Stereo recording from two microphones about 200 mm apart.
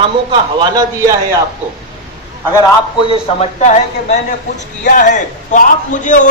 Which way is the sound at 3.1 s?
30° left (ahead or behind).